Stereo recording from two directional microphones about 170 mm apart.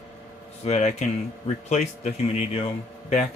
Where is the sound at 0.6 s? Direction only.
40° left (ahead or behind).